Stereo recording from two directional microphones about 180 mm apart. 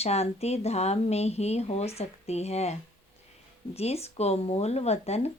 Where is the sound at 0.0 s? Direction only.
35° left (ahead or behind).